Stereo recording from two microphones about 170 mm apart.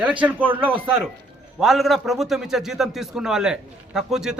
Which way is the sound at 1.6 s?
Centre (ahead or behind).